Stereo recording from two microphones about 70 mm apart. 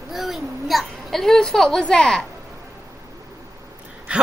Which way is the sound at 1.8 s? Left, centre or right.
Centre.